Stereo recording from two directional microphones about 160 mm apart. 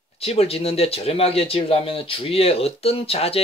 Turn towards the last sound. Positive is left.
turn(degrees=35)  # may be behind; listen again after turning